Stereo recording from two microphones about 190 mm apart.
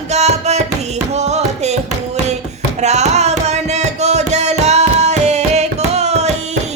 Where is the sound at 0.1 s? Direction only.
35° right (ahead or behind).